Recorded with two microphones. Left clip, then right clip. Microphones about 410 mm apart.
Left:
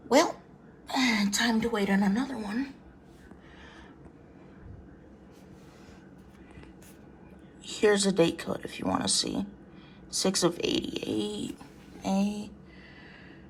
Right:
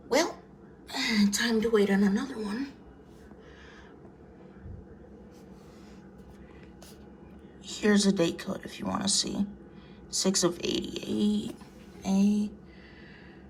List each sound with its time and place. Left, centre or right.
0.1 s a sound: centre
0.9 s a woman's voice: centre
7.6 s speech: centre